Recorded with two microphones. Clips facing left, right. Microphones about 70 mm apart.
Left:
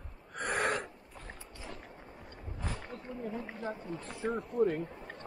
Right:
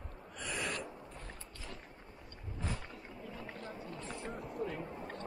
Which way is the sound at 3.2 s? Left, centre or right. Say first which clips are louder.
Left 7 dB; left.